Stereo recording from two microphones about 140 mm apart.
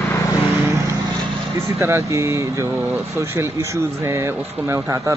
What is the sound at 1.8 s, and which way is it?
A man's voice, 20° right (ahead or behind).